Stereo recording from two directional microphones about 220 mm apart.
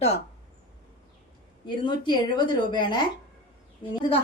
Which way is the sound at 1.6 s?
20° left (ahead or behind).